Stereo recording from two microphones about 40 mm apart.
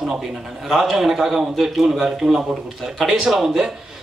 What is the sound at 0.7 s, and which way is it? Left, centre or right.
A man's voice, centre.